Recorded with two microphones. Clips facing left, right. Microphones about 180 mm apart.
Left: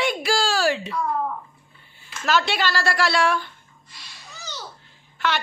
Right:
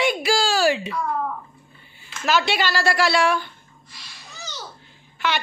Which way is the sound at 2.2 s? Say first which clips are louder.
Right 1 dB; centre (ahead or behind).